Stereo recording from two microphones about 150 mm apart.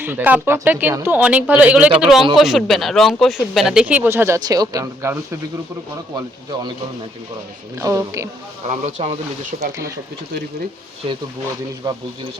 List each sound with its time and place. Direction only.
0.0 s speech: 15° right (ahead or behind)
6.1 s a man's voice: 30° right (ahead or behind)
7.8 s a man's voice: 20° right (ahead or behind)
8.7 s speech: 50° right (ahead or behind)
11.8 s a man's voice: 25° right (ahead or behind)